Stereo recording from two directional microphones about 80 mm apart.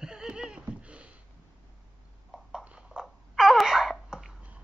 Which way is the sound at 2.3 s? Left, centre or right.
Centre.